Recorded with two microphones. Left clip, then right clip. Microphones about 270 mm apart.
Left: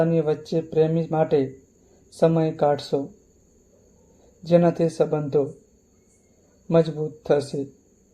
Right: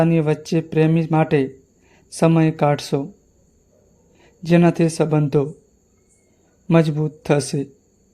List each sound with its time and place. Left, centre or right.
0.0 s speech: right
4.4 s speech: right
6.7 s speech: right